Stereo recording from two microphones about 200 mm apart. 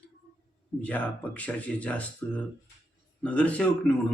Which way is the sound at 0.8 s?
5° left (ahead or behind).